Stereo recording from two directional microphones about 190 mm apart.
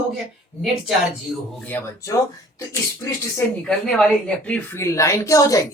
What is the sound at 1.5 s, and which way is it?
A woman's voice, 10° left (ahead or behind).